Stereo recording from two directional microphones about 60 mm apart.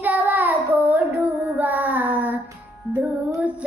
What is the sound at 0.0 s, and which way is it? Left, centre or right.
Child singing, right.